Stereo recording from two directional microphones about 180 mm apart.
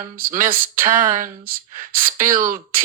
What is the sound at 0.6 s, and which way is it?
Speech, 15° right (ahead or behind).